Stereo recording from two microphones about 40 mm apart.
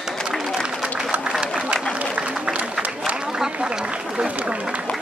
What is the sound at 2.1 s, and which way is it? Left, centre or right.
Applause, right.